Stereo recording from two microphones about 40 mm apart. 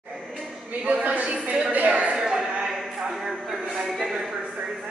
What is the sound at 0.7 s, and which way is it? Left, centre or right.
A man's voice, right.